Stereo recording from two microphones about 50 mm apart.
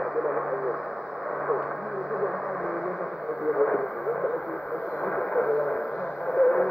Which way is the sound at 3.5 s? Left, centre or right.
Centre.